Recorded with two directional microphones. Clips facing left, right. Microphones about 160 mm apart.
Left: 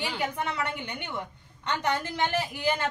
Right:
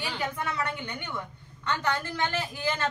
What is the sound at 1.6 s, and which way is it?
Speech, 20° left (ahead or behind).